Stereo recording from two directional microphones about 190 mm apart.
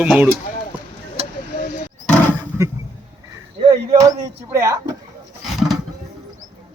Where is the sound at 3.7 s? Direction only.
20° right (ahead or behind).